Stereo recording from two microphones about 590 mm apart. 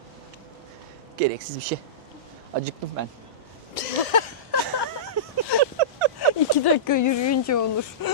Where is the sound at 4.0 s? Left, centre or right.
Left.